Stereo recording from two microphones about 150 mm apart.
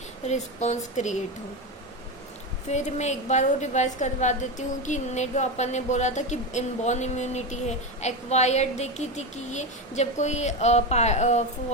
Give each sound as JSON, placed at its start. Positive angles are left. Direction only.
{"t": 0.3, "sound": "a woman's voice", "side_deg": 50}
{"t": 2.6, "sound": "a woman's voice", "side_deg": 50}